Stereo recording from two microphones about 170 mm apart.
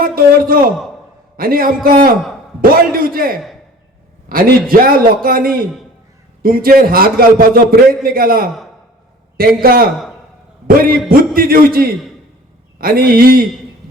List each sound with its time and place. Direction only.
0.0 s a man's voice: 55° right (ahead or behind)
9.6 s a man's voice: 60° right (ahead or behind)
11.1 s a man's voice: 60° right (ahead or behind)